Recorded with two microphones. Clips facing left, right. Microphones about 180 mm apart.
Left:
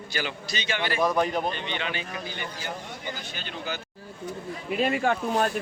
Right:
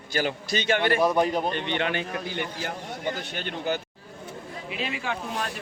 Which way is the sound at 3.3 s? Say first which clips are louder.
Right 5 dB; 60° right (ahead or behind).